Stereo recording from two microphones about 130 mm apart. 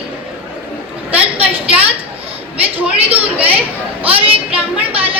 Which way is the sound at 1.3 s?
50° right (ahead or behind).